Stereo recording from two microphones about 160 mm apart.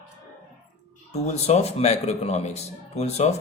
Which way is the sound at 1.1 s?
45° left (ahead or behind).